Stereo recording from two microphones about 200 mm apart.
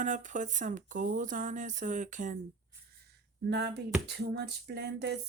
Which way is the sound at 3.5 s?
55° right (ahead or behind).